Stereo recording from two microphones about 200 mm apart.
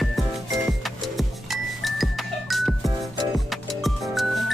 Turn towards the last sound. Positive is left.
turn(degrees=0)  # may be behind; listen again after turning